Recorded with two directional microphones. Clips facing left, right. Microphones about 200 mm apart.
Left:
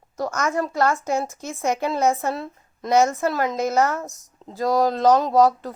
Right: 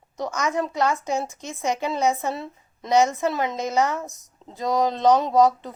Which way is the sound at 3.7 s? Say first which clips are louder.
Left 1 dB; 15° right (ahead or behind).